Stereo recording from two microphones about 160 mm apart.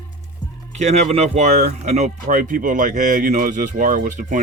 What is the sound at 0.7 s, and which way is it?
Speech, 45° right (ahead or behind).